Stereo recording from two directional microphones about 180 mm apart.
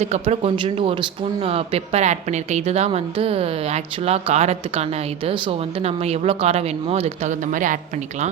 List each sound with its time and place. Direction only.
0.0 s speech: 35° right (ahead or behind)